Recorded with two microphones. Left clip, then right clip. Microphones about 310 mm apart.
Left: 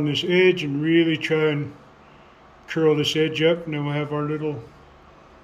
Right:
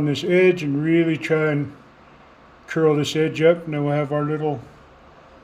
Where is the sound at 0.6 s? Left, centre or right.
Centre.